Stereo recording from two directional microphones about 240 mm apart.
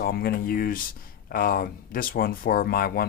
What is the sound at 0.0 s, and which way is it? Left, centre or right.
Speech, left.